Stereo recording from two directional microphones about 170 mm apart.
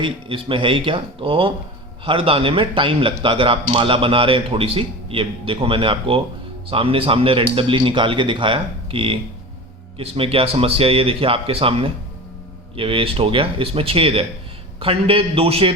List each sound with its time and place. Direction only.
0.0 s a man's voice: 30° right (ahead or behind)